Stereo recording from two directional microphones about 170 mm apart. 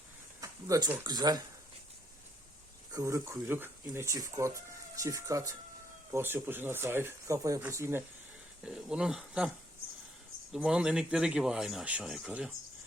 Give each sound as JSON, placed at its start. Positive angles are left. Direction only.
{"t": 0.4, "sound": "speech", "side_deg": -20}
{"t": 2.9, "sound": "speech", "side_deg": -20}
{"t": 8.6, "sound": "speech", "side_deg": -5}
{"t": 10.5, "sound": "speech", "side_deg": -5}